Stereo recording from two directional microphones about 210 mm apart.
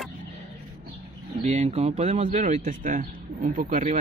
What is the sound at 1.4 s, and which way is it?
A man's voice, 30° right (ahead or behind).